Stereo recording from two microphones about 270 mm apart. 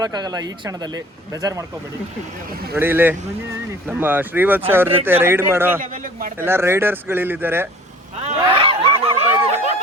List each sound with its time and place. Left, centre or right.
0.0 s speech: centre
2.5 s speech: right
2.7 s speech: centre
5.8 s a man's voice: right
6.3 s speech: centre
8.3 s a sound: right